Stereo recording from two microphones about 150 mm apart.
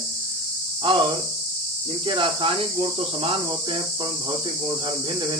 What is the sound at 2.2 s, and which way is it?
Speech, 35° right (ahead or behind).